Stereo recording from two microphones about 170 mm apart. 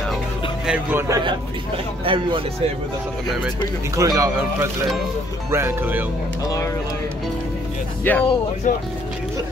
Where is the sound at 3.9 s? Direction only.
20° right (ahead or behind).